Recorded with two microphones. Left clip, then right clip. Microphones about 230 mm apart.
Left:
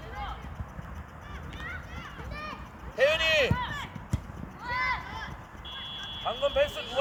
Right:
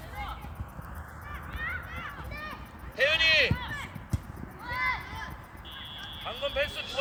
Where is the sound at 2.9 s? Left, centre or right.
Left.